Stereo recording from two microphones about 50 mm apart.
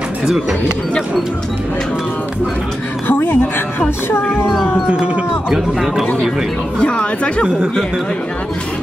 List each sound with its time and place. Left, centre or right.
3.1 s speech: left
4.8 s music: right
5.5 s speech: centre
6.8 s speech: left